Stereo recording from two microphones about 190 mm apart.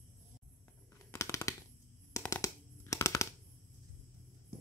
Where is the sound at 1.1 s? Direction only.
15° left (ahead or behind).